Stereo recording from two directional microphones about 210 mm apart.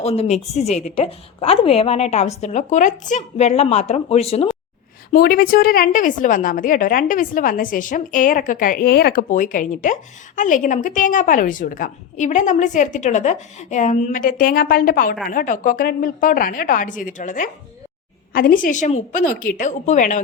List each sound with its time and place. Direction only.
0.0 s a woman's voice: 30° left (ahead or behind)
5.1 s a woman's voice: 45° left (ahead or behind)